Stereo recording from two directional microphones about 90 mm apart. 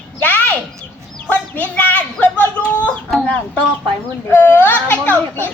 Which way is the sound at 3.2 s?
15° left (ahead or behind).